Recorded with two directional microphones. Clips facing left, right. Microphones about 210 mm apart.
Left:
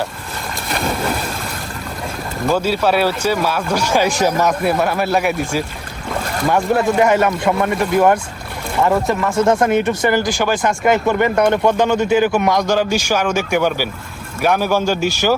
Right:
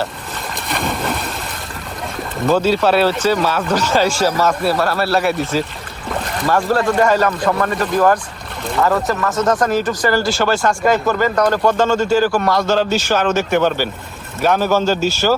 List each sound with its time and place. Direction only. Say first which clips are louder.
0.7 s boat: left 1 dB; centre (ahead or behind)
2.5 s speech: right 2 dB; 10° left (ahead or behind)